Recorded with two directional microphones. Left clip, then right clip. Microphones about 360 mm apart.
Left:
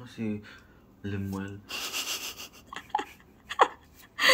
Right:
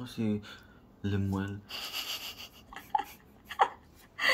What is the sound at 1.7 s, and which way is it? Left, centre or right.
Wheeze, left.